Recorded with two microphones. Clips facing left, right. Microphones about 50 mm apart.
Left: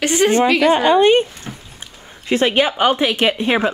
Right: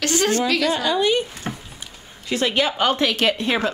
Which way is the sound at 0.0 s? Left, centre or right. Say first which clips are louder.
Left 6 dB; left.